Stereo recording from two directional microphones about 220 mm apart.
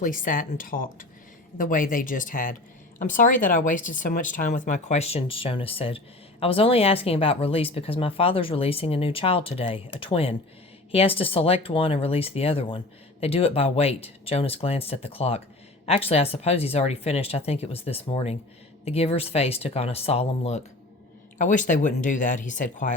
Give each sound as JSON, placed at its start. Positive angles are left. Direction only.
{"t": 0.0, "sound": "speech", "side_deg": 35}